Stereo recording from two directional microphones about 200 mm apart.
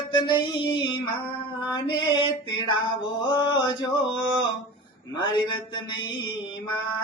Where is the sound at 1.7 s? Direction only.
25° left (ahead or behind).